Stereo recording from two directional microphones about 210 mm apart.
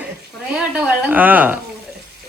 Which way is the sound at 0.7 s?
5° right (ahead or behind).